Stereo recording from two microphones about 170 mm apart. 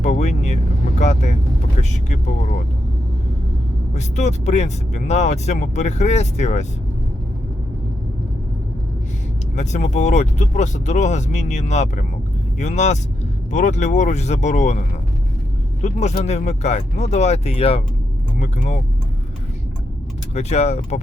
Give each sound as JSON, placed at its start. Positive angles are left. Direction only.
{"t": 0.0, "sound": "speech", "side_deg": 45}
{"t": 3.9, "sound": "speech", "side_deg": 45}
{"t": 9.6, "sound": "speech", "side_deg": 45}
{"t": 20.3, "sound": "speech", "side_deg": 40}